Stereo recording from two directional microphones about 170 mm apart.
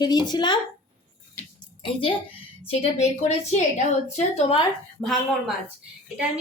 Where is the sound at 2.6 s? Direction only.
35° left (ahead or behind).